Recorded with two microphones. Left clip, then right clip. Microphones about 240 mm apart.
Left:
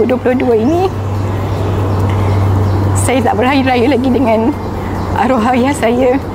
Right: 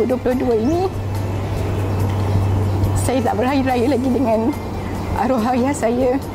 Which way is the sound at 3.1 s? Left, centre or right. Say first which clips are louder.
Left 6 dB; left.